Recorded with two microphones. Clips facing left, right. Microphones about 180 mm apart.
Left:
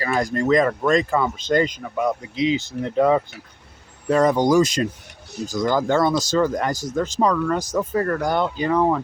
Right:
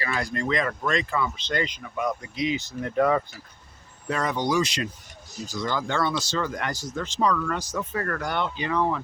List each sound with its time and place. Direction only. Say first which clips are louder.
0.0 s speech: left 7 dB; 45° left (ahead or behind)
2.0 s speech: left 6 dB; 25° left (ahead or behind)
4.1 s speech: left 9 dB; 40° left (ahead or behind)